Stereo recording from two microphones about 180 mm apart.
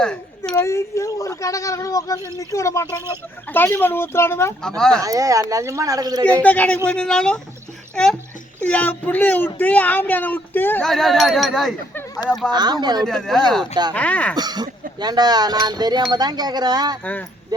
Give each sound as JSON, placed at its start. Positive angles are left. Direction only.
{"t": 0.0, "sound": "a sound", "side_deg": 5}
{"t": 0.5, "sound": "speech", "side_deg": 15}
{"t": 5.0, "sound": "speech", "side_deg": -20}
{"t": 6.4, "sound": "speech", "side_deg": 10}
{"t": 8.6, "sound": "speech", "side_deg": 10}
{"t": 12.5, "sound": "speech", "side_deg": -25}
{"t": 13.1, "sound": "speech", "side_deg": 5}
{"t": 14.3, "sound": "speech", "side_deg": -20}
{"t": 17.0, "sound": "speech", "side_deg": 10}